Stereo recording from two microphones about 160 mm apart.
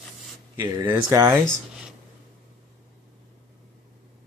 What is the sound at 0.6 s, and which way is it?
Speech, 25° right (ahead or behind).